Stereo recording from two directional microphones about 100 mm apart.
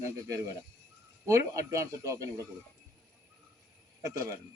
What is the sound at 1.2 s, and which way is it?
Speech, 30° right (ahead or behind).